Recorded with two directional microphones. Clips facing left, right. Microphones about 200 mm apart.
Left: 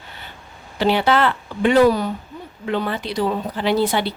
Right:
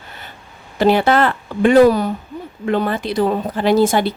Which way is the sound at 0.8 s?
50° right (ahead or behind).